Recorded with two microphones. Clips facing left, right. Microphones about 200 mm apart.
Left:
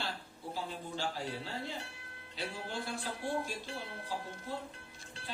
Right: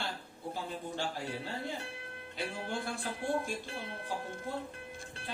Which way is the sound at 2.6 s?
50° right (ahead or behind).